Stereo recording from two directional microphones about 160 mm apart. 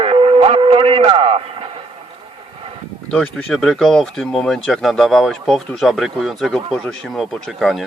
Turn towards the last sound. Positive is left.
turn(degrees=0)  # may be behind; listen again after turning